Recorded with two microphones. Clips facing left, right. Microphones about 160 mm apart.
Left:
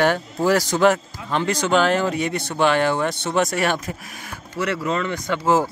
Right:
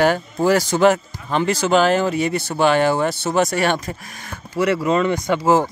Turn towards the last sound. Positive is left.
turn(degrees=-15)  # may be behind; listen again after turning